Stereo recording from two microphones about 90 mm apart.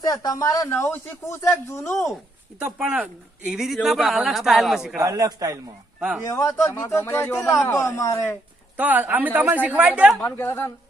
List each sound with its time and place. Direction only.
0.0 s speech: 50° left (ahead or behind)
0.7 s speech: 25° left (ahead or behind)
2.7 s speech: 10° right (ahead or behind)
4.9 s a man's voice: 40° right (ahead or behind)
6.2 s speech: 40° left (ahead or behind)
8.7 s speech: 20° right (ahead or behind)
10.2 s a woman's voice: 25° left (ahead or behind)